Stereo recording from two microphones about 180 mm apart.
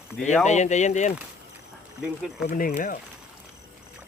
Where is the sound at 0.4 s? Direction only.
40° left (ahead or behind).